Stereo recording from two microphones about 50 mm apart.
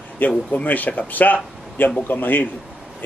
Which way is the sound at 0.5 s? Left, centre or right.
Left.